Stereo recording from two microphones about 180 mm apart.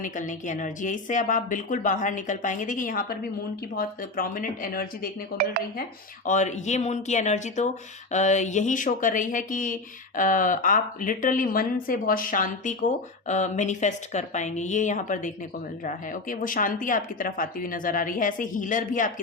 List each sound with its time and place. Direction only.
0.0 s speech: 45° left (ahead or behind)
6.2 s speech: 40° left (ahead or behind)